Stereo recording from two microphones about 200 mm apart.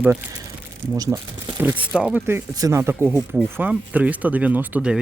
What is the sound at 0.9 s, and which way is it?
Speech, 20° right (ahead or behind).